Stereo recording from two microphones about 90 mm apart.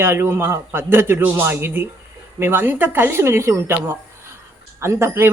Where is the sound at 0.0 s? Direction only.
25° right (ahead or behind).